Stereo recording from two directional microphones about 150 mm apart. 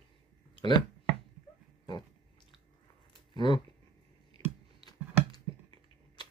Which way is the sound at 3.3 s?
30° left (ahead or behind).